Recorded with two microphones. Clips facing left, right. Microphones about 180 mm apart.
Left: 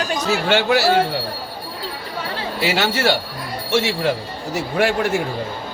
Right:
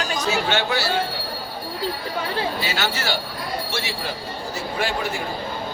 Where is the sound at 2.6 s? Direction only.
80° left.